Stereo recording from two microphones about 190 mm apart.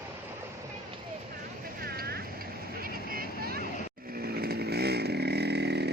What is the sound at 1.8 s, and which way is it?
Vehicle, 55° right (ahead or behind).